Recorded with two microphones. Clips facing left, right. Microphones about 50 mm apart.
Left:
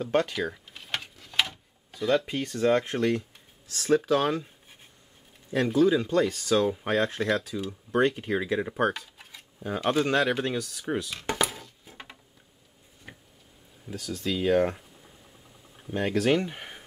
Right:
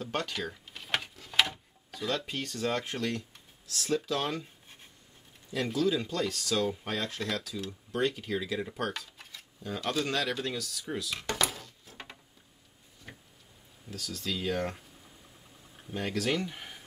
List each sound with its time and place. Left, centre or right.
0.0 s speech: centre
0.3 s drawer open or close: centre
0.8 s clock: centre
1.9 s speech: centre
3.8 s speech: left
5.7 s speech: left
8.9 s a sound: centre
9.6 s speech: left
11.4 s a sound: centre
11.8 s a sound: centre
13.1 s tick-tock: centre
13.8 s speech: centre
15.9 s speech: left